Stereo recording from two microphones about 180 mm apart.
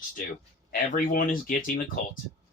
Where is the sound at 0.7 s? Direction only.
50° left (ahead or behind).